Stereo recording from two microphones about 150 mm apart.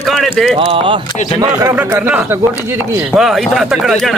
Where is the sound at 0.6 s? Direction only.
35° right (ahead or behind).